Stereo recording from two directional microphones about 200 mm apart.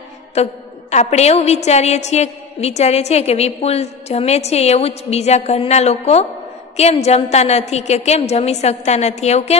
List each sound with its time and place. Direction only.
0.3 s a woman's voice: 35° left (ahead or behind)